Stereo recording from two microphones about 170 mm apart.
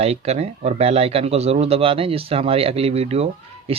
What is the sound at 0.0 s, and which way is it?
Speech, 40° right (ahead or behind).